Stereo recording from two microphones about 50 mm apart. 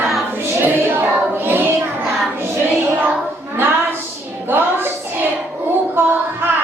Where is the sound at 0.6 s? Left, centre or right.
Right.